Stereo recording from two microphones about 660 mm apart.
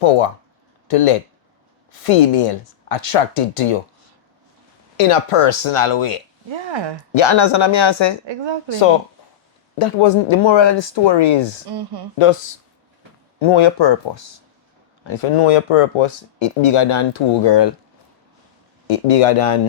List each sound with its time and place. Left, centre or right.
0.9 s speech: left
4.9 s speech: left
6.5 s speech: right
7.1 s speech: left
9.7 s speech: left
11.7 s speech: right
12.1 s speech: left
18.9 s speech: left